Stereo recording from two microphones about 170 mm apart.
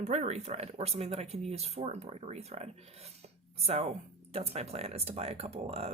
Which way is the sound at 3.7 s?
35° right (ahead or behind).